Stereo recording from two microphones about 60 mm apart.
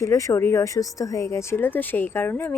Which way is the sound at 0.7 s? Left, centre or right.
Left.